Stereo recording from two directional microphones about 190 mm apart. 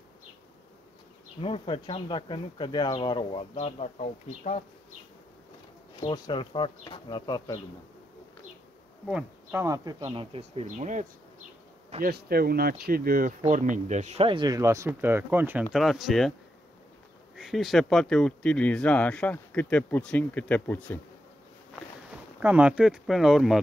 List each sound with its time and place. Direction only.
1.4 s speech: 30° left (ahead or behind)
6.1 s speech: 25° left (ahead or behind)
9.5 s speech: 15° right (ahead or behind)
10.3 s speech: 35° right (ahead or behind)
12.0 s speech: 55° right (ahead or behind); by 15.6 s 10° right (ahead or behind)
15.7 s speech: centre (ahead or behind)
17.4 s speech: centre (ahead or behind)
22.4 s speech: 10° right (ahead or behind)